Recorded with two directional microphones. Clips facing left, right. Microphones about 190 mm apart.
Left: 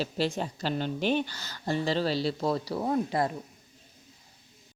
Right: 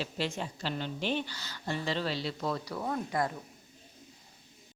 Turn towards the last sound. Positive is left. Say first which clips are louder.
# left 5 dB
turn(degrees=30)  # may be behind; listen again after turning